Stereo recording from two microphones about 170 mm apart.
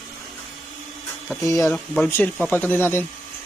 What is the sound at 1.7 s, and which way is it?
Speech, 5° left (ahead or behind).